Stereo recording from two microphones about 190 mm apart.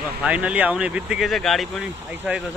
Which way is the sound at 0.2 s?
5° right (ahead or behind).